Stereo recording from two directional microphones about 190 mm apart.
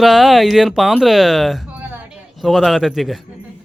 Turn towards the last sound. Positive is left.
turn(degrees=0)  # may be behind; listen again after turning